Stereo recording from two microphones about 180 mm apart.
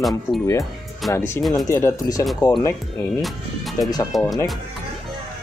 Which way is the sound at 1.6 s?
15° left (ahead or behind).